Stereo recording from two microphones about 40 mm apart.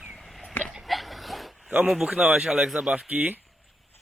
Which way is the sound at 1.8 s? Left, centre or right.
Centre.